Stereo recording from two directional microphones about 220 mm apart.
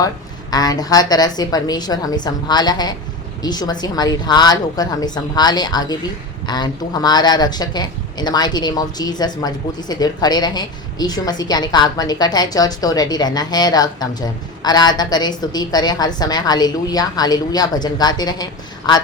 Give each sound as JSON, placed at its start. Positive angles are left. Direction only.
{"t": 0.5, "sound": "a woman's voice", "side_deg": 15}